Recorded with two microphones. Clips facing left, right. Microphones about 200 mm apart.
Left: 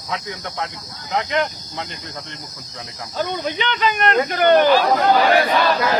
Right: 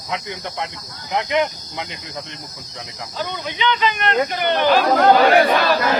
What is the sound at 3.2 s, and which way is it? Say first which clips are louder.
Speech: left 3 dB; 45° left (ahead or behind).